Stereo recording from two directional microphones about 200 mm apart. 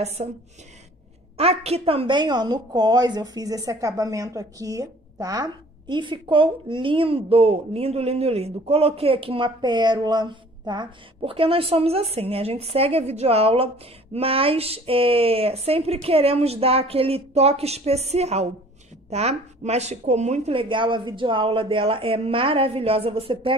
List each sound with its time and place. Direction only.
0.2 s a woman's voice: 30° right (ahead or behind)
1.4 s a woman's voice: 30° right (ahead or behind)